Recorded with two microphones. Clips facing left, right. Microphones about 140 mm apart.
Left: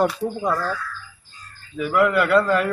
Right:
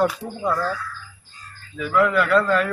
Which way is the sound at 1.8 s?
10° left (ahead or behind).